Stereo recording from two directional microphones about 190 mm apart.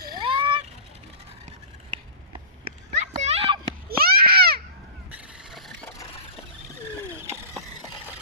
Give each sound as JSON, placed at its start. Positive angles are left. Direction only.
{"t": 0.2, "sound": "vehicle", "side_deg": -25}
{"t": 2.6, "sound": "children playing", "side_deg": -30}
{"t": 3.8, "sound": "a sound", "side_deg": -55}
{"t": 5.1, "sound": "vehicle", "side_deg": 0}